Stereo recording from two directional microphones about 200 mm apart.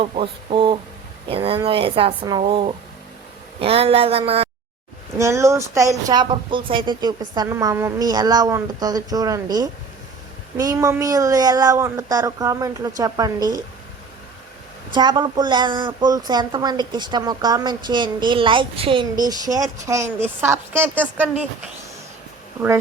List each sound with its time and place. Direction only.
0.0 s a woman's voice: 25° right (ahead or behind)
5.1 s speech: 15° right (ahead or behind)
14.9 s a woman's voice: 20° right (ahead or behind)